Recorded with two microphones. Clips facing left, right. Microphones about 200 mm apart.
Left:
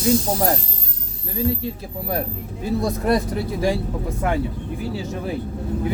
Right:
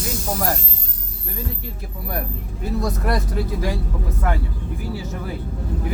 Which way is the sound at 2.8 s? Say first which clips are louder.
Left 4 dB; 25° left (ahead or behind).